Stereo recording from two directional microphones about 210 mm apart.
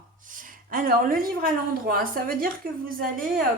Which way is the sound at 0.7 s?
45° right (ahead or behind).